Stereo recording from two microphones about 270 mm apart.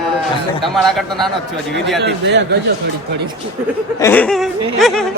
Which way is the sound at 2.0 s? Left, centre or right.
Right.